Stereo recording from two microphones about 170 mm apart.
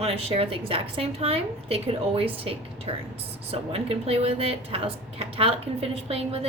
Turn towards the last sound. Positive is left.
turn(degrees=-35)  # may be behind; listen again after turning